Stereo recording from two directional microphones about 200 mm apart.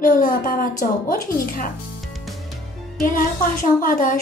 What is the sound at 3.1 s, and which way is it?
A woman's voice, 45° left (ahead or behind).